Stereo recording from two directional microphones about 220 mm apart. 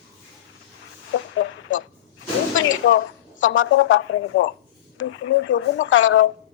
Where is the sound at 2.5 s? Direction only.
60° left (ahead or behind).